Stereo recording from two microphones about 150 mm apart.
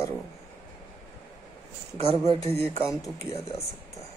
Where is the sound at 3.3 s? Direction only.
45° left (ahead or behind).